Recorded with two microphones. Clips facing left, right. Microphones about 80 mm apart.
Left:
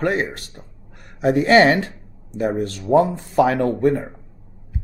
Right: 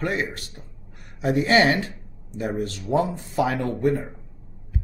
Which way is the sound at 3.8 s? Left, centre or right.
Left.